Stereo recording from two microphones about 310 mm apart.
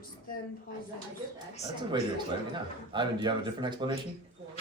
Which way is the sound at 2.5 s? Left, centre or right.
Centre.